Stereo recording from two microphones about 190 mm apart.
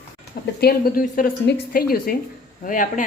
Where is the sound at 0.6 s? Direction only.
50° left (ahead or behind).